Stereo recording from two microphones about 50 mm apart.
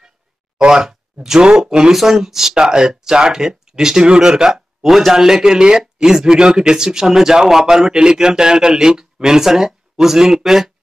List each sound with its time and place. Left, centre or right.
0.6 s a man's voice: centre
4.8 s a man's voice: centre